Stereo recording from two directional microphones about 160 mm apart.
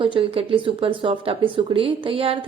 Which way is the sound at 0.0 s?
35° right (ahead or behind).